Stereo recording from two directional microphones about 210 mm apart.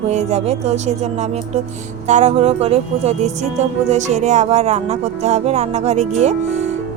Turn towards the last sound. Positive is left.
turn(degrees=-35)  # may be behind; listen again after turning